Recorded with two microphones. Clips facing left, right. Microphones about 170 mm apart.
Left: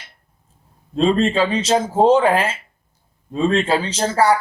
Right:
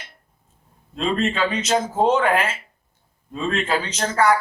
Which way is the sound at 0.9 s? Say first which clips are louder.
Left 6 dB; 30° left (ahead or behind).